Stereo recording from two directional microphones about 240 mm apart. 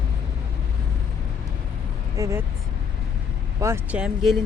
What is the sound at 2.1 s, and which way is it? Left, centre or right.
Speech, centre.